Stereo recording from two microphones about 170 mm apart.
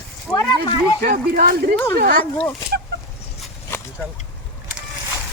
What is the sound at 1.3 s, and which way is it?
Speech, 60° right (ahead or behind).